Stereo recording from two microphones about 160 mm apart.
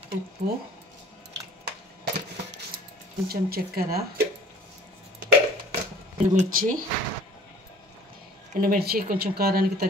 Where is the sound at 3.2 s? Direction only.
75° right (ahead or behind).